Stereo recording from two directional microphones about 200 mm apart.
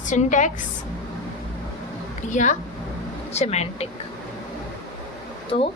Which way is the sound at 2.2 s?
35° left (ahead or behind).